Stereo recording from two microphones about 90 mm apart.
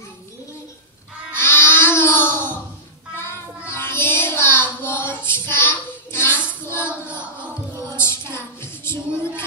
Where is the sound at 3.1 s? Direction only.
30° left (ahead or behind).